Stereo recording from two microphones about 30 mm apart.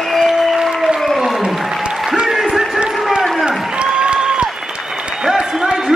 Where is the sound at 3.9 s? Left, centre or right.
Right.